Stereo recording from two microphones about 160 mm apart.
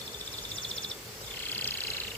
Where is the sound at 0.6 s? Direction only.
5° left (ahead or behind).